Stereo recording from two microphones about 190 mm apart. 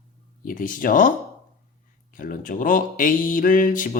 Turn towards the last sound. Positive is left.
turn(degrees=45)  # may be behind; listen again after turning